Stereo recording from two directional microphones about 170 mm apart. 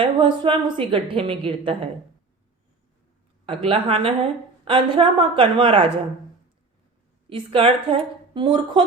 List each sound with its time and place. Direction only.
0.0 s a woman's voice: 30° right (ahead or behind)
3.4 s a woman's voice: 30° right (ahead or behind)
7.3 s a woman's voice: 30° right (ahead or behind)